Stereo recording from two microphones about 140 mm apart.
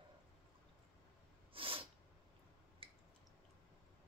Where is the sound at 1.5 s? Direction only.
40° right (ahead or behind).